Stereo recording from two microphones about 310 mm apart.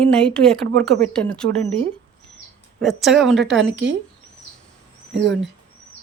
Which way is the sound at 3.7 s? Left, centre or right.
Right.